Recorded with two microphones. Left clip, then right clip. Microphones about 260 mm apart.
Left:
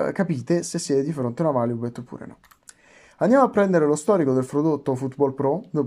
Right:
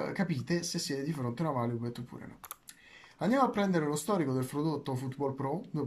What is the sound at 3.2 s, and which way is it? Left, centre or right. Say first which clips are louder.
Speech: left 11 dB; left.